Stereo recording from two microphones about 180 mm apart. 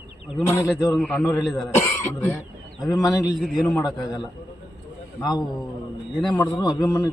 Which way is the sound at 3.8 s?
20° left (ahead or behind).